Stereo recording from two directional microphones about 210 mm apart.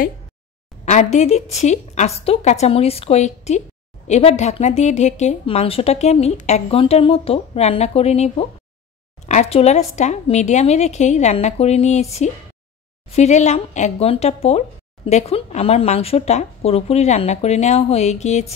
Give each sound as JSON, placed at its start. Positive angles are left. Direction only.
{"t": 0.8, "sound": "a woman's voice", "side_deg": 35}